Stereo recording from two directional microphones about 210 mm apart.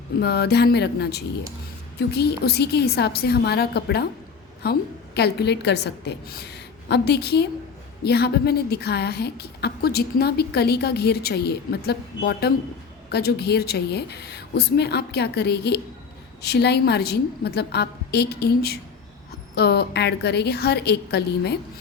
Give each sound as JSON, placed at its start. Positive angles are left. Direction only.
{"t": 0.2, "sound": "a woman's voice", "side_deg": 50}